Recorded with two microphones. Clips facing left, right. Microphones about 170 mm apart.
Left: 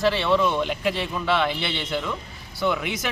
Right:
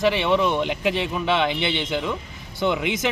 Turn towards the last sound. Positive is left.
turn(degrees=-20)  # may be behind; listen again after turning